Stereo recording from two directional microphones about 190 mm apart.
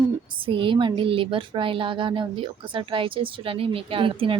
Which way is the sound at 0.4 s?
25° right (ahead or behind).